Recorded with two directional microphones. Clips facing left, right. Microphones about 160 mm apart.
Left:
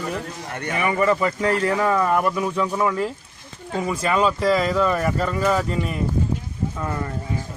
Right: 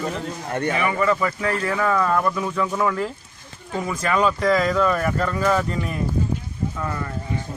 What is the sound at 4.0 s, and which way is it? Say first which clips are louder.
Speech: even; 25° left (ahead or behind).